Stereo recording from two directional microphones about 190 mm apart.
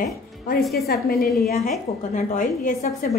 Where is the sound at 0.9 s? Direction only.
55° left (ahead or behind).